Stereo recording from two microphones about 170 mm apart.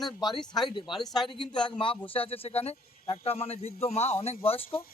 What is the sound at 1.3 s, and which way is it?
A man's voice, 30° left (ahead or behind).